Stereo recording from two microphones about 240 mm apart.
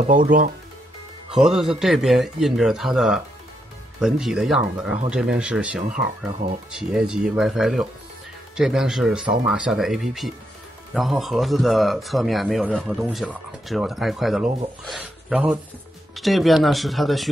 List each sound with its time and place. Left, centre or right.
0.0 s speech: right
1.3 s speech: centre